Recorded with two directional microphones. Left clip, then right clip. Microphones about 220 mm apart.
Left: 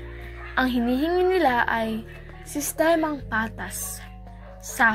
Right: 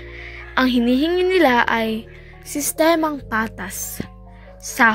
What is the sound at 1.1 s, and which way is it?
Speech, 90° right.